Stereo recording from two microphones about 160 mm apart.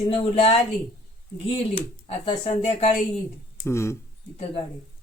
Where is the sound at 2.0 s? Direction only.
35° left (ahead or behind).